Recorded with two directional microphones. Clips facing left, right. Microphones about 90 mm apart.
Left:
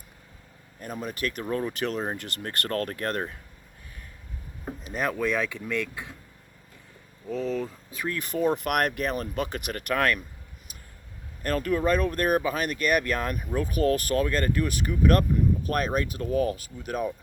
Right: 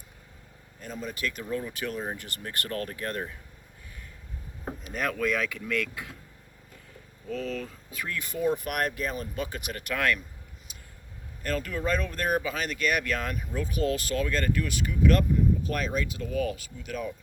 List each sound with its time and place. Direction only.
0.8 s speech: 55° left (ahead or behind)
4.8 s a sound: 30° left (ahead or behind)
5.1 s speech: 25° left (ahead or behind)
7.3 s speech: 25° left (ahead or behind)
8.0 s speech: 45° left (ahead or behind)
11.4 s speech: 50° left (ahead or behind)